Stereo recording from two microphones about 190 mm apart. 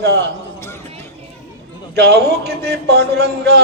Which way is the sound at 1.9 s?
60° right (ahead or behind).